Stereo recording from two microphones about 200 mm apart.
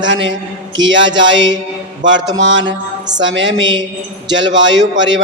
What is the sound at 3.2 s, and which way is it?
A man's voice, 70° right (ahead or behind).